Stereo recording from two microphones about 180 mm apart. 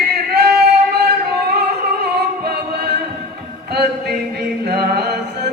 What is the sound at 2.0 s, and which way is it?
Music, 60° right (ahead or behind).